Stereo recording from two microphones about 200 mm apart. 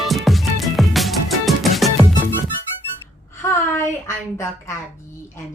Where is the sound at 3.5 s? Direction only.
15° left (ahead or behind).